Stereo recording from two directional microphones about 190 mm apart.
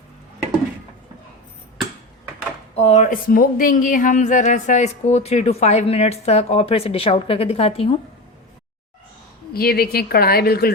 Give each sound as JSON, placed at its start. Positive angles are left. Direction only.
{"t": 2.7, "sound": "speech", "side_deg": 35}
{"t": 9.5, "sound": "a woman's voice", "side_deg": 55}